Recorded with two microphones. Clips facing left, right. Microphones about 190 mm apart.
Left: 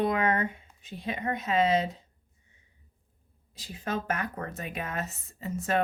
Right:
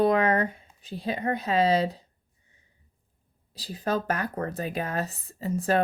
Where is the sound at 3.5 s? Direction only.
35° right (ahead or behind).